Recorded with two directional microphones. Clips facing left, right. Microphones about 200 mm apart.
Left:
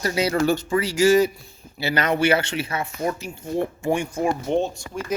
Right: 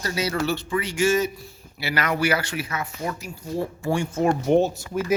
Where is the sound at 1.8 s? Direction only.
25° left (ahead or behind).